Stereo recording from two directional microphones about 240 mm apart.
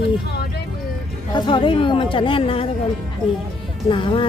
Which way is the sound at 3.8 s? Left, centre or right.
Left.